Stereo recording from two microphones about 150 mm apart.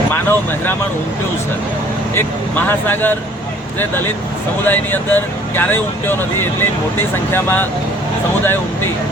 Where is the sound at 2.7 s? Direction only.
15° left (ahead or behind).